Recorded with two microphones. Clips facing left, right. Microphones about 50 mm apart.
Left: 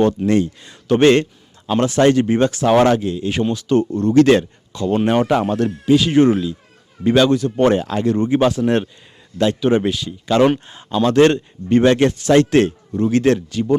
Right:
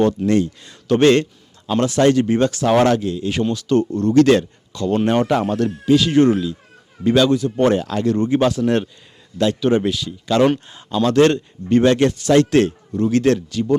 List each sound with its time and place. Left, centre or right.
0.0 s a man's voice: left
7.3 s speech: left
7.5 s a man's voice: left